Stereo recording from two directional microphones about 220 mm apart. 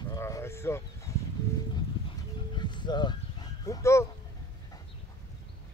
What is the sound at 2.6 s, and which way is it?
Dog, 20° left (ahead or behind).